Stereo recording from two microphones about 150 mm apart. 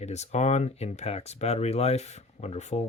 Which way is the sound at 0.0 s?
50° left (ahead or behind).